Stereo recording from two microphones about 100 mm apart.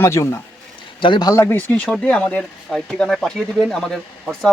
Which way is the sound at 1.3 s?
25° left (ahead or behind).